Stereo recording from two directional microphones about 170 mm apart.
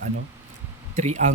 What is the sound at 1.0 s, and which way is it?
Speech, 45° right (ahead or behind).